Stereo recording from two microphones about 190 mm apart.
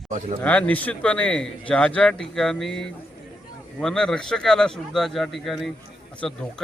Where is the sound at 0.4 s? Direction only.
5° left (ahead or behind).